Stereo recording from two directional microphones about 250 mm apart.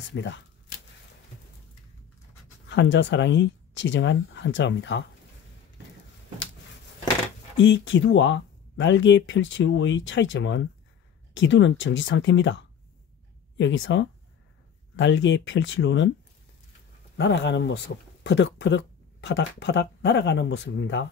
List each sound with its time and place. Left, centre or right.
0.1 s speech: left
2.7 s speech: left
7.5 s speech: left
17.2 s speech: left